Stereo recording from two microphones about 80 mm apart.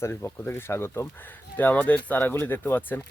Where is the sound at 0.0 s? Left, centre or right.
Left.